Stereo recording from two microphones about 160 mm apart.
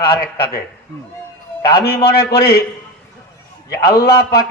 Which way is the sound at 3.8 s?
75° left (ahead or behind).